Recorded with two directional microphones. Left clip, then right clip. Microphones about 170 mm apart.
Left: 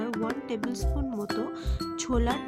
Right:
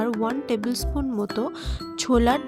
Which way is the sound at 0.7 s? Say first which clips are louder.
Right 6 dB; 35° right (ahead or behind).